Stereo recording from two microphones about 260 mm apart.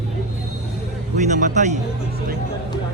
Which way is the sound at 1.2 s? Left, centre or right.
Right.